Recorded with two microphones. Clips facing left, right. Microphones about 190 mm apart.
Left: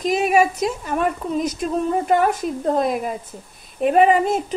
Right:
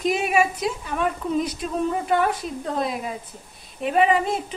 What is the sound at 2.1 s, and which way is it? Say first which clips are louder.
A woman's voice: left 4 dB; 45° left (ahead or behind).